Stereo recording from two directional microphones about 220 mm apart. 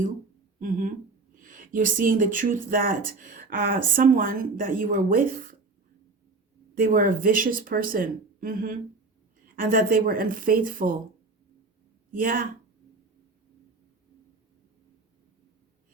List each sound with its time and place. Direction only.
1.4 s speech: 35° right (ahead or behind)
6.7 s speech: 40° right (ahead or behind)
12.1 s speech: 40° right (ahead or behind)